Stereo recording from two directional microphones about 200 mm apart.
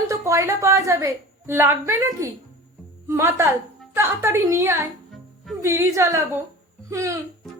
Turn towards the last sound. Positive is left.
turn(degrees=-15)  # may be behind; listen again after turning